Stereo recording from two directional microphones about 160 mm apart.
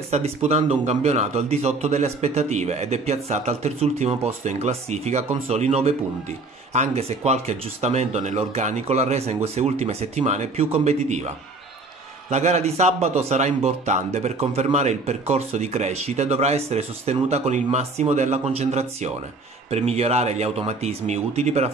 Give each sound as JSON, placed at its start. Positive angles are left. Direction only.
{"t": 0.1, "sound": "speech", "side_deg": -40}